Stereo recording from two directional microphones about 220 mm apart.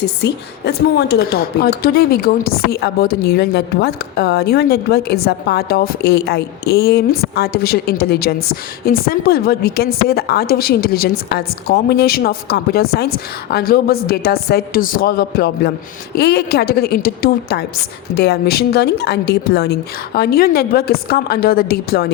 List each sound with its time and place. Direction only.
0.0 s a woman's voice: 50° left (ahead or behind)